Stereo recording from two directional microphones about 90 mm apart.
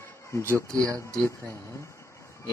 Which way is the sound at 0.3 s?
30° left (ahead or behind).